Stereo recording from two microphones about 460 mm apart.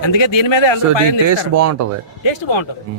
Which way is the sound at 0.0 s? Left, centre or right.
Left.